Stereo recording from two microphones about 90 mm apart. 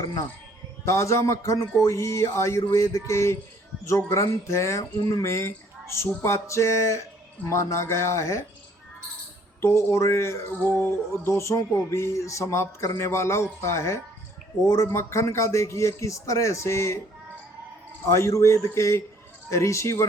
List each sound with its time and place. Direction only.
0.9 s speech: 30° left (ahead or behind)
9.6 s speech: 30° left (ahead or behind)
10.6 s music: 25° left (ahead or behind)
11.2 s speech: 30° left (ahead or behind)
18.1 s speech: 35° left (ahead or behind)